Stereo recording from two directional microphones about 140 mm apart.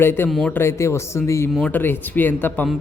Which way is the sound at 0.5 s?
20° left (ahead or behind).